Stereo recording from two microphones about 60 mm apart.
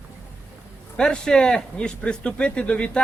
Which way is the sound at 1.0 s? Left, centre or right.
Centre.